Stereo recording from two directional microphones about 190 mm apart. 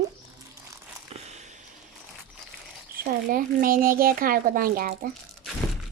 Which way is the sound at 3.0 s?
50° right (ahead or behind).